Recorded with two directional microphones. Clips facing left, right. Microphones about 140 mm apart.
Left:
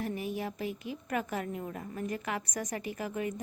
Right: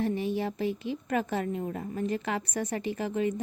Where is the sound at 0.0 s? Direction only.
30° right (ahead or behind).